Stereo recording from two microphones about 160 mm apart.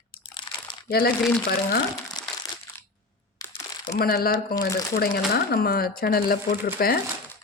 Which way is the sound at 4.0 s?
70° left (ahead or behind).